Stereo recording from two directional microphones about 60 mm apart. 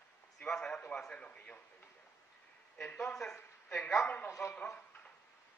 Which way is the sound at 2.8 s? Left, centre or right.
Centre.